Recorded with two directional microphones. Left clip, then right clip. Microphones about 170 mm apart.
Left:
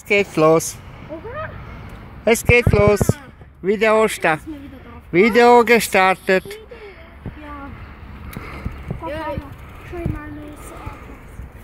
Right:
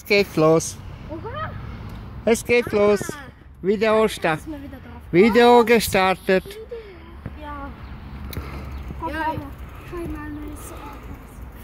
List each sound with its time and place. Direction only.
0.1 s speech: centre (ahead or behind)
2.2 s speech: centre (ahead or behind)
8.5 s a sound: 5° left (ahead or behind)